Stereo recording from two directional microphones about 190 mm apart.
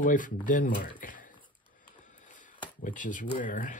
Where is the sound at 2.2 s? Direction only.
45° left (ahead or behind).